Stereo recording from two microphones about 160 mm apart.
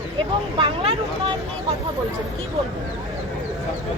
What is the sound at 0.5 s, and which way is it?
Speech, 35° right (ahead or behind).